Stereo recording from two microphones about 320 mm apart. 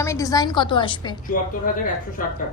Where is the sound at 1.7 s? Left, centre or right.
Left.